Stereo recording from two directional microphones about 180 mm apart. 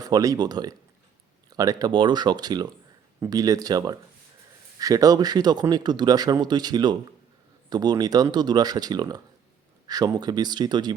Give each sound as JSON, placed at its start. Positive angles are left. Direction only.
{"t": 0.0, "sound": "speech", "side_deg": -20}